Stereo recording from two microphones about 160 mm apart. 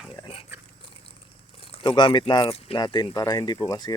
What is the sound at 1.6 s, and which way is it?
Speech, 35° left (ahead or behind).